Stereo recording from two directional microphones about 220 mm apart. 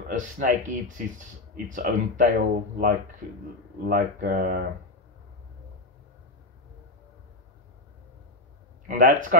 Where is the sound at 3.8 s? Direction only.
40° right (ahead or behind).